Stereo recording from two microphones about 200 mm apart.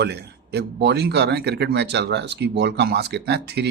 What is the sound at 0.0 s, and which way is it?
Speech, 55° right (ahead or behind).